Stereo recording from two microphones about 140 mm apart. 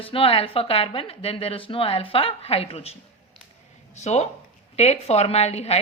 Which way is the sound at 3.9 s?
55° left (ahead or behind).